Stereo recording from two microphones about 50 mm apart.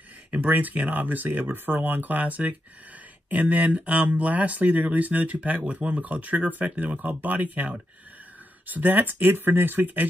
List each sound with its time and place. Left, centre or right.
0.3 s speech: right